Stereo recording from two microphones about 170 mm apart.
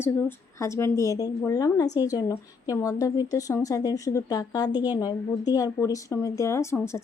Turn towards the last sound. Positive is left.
turn(degrees=15)  # may be behind; listen again after turning